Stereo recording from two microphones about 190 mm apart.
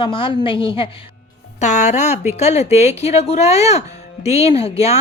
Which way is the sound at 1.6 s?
35° left (ahead or behind).